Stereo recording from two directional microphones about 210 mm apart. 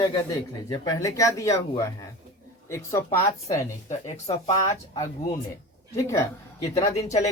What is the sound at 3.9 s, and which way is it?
Speech, 30° left (ahead or behind).